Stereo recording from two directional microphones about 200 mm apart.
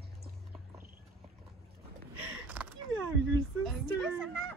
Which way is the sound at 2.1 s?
5° right (ahead or behind).